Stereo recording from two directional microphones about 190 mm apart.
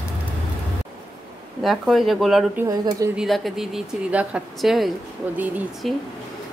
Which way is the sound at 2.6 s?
20° right (ahead or behind).